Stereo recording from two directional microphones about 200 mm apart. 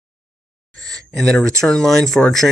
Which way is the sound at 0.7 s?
5° left (ahead or behind).